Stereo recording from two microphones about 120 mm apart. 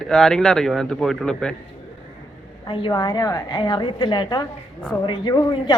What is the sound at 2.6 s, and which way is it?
A woman's voice, 40° left (ahead or behind).